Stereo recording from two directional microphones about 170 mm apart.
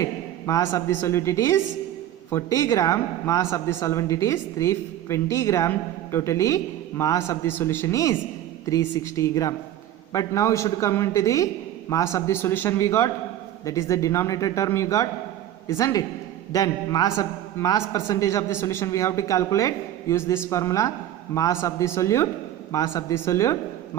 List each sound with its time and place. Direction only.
0.0 s a woman's voice: 20° left (ahead or behind)